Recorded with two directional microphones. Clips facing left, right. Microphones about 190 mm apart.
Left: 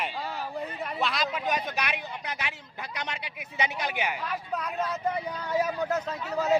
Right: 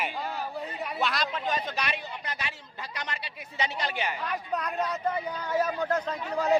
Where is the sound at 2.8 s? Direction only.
15° left (ahead or behind).